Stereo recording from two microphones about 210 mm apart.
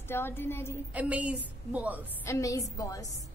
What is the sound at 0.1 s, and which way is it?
Speech, 10° left (ahead or behind).